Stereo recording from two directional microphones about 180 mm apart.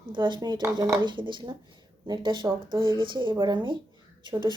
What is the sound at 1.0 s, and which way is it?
Speech, 25° right (ahead or behind).